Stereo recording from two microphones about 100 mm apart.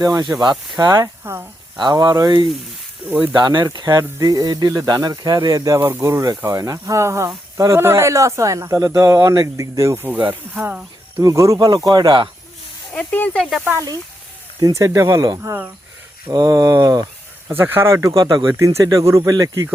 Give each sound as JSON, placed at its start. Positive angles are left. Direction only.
{"t": 0.0, "sound": "speech", "side_deg": -40}
{"t": 1.2, "sound": "speech", "side_deg": -20}
{"t": 1.8, "sound": "speech", "side_deg": -45}
{"t": 3.0, "sound": "speech", "side_deg": -15}
{"t": 3.3, "sound": "speech", "side_deg": -45}
{"t": 5.8, "sound": "speech", "side_deg": -25}
{"t": 11.2, "sound": "speech", "side_deg": -35}
{"t": 12.9, "sound": "speech", "side_deg": 15}
{"t": 14.6, "sound": "speech", "side_deg": -30}
{"t": 17.5, "sound": "speech", "side_deg": -25}